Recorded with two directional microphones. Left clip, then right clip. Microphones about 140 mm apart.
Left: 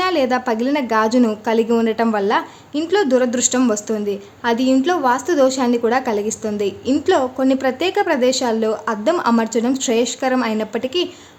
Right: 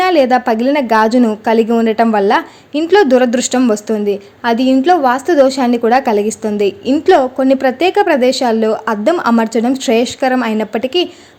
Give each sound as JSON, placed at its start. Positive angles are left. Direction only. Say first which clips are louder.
{"t": 0.0, "sound": "a woman's voice", "louder": "right 7 dB", "side_deg": -30}